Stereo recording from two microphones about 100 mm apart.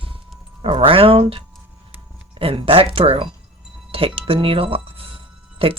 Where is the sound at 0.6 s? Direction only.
65° right (ahead or behind).